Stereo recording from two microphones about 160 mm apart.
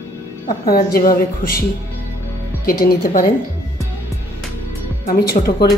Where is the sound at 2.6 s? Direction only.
65° left (ahead or behind).